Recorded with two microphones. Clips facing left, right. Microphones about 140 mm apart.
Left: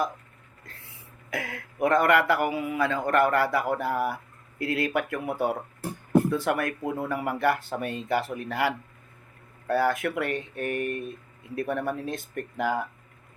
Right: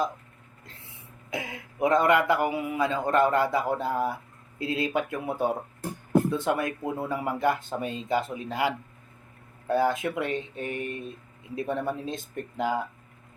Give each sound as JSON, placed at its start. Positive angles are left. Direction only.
{"t": 0.6, "sound": "speech", "side_deg": -25}
{"t": 6.3, "sound": "speech", "side_deg": -20}
{"t": 7.8, "sound": "speech", "side_deg": 55}
{"t": 8.0, "sound": "speech", "side_deg": -20}
{"t": 10.8, "sound": "speech", "side_deg": 55}
{"t": 11.5, "sound": "speech", "side_deg": -20}